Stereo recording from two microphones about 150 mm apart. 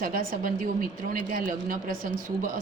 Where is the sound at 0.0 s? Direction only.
70° right (ahead or behind).